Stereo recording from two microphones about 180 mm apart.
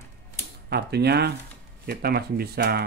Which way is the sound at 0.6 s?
65° right (ahead or behind).